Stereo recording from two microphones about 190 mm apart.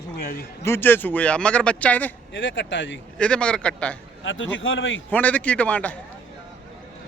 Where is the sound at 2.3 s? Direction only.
75° left (ahead or behind).